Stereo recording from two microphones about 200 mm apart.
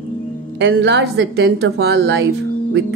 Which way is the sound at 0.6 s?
60° right (ahead or behind).